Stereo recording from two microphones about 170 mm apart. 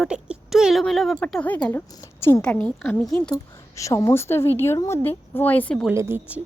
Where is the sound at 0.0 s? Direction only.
5° right (ahead or behind).